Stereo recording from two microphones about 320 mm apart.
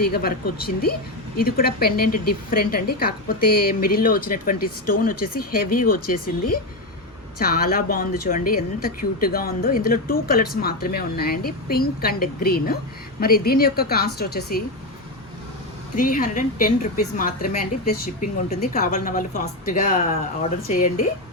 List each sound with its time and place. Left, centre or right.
0.0 s a woman's voice: left
16.0 s a woman's voice: left